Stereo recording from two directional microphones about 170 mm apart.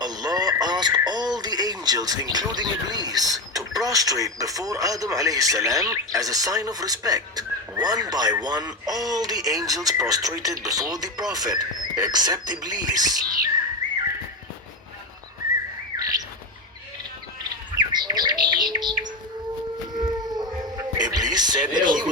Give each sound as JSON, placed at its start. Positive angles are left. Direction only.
{"t": 0.0, "sound": "speech", "side_deg": -25}
{"t": 16.0, "sound": "chirp", "side_deg": -20}
{"t": 17.7, "sound": "bird", "side_deg": -25}
{"t": 20.0, "sound": "a sound", "side_deg": -25}